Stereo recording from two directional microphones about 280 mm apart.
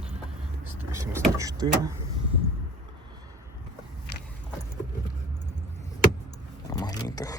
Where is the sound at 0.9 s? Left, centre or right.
Centre.